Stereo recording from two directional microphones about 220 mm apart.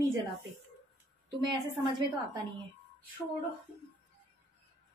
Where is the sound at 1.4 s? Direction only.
20° right (ahead or behind).